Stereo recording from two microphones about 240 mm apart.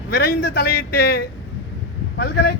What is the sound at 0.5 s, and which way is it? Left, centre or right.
A man's voice, left.